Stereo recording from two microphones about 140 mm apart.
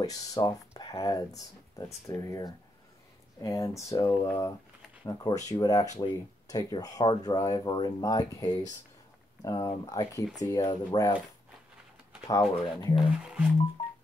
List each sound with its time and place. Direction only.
0.0 s speech: 25° left (ahead or behind)
12.3 s speech: 25° left (ahead or behind)
12.9 s speech: 5° right (ahead or behind)